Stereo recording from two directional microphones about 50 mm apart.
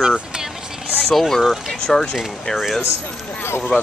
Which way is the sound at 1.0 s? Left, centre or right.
Centre.